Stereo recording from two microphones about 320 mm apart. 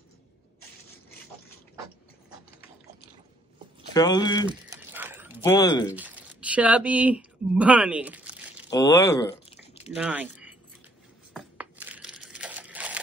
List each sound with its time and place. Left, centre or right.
3.9 s speech: centre
4.5 s a sound: centre
5.4 s speech: centre
5.9 s speech: centre
8.6 s speech: centre
9.9 s speech: centre
11.8 s camera: centre